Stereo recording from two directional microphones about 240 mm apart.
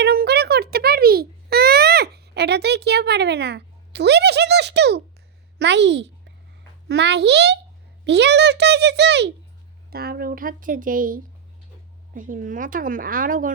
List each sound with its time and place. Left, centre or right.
0.0 s babbling: right
5.5 s a child's voice: right